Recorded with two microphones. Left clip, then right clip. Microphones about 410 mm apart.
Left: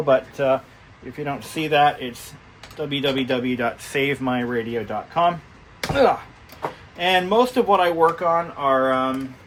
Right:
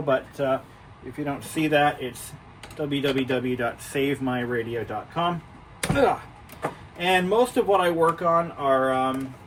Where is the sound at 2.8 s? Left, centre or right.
Centre.